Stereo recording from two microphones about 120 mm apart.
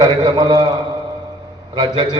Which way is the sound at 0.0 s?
35° right (ahead or behind).